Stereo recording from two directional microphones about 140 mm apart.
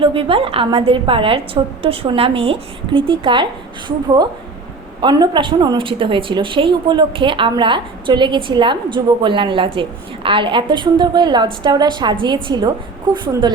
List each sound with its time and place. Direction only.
0.0 s a woman's voice: 40° right (ahead or behind)